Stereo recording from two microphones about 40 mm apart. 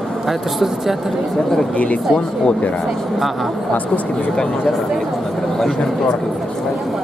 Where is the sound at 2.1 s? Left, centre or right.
Left.